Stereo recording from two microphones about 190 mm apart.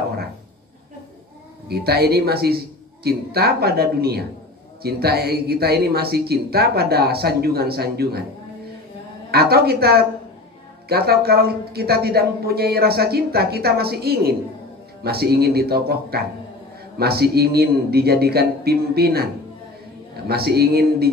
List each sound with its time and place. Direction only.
1.7 s a man's voice: 55° right (ahead or behind)
9.3 s a man's voice: 55° right (ahead or behind)
20.2 s a man's voice: 55° right (ahead or behind)